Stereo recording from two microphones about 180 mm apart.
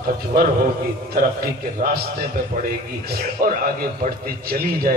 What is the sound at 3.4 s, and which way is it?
A man's voice, 55° right (ahead or behind).